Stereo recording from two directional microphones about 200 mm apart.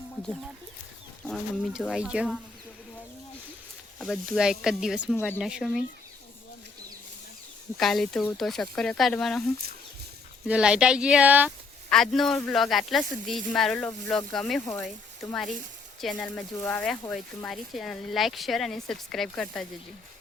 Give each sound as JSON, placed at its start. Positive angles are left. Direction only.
{"t": 1.3, "sound": "speech", "side_deg": 0}
{"t": 3.9, "sound": "speech", "side_deg": 0}
{"t": 5.1, "sound": "speech", "side_deg": 10}
{"t": 5.4, "sound": "speech", "side_deg": -5}
{"t": 7.8, "sound": "speech", "side_deg": 0}
{"t": 10.4, "sound": "speech", "side_deg": -5}
{"t": 16.0, "sound": "speech", "side_deg": 5}